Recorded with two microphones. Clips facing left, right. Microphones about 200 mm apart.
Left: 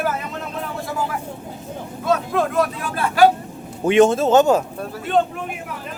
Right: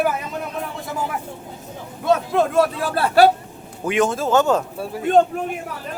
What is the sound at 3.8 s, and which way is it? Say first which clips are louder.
Speech: left 6 dB; 25° left (ahead or behind).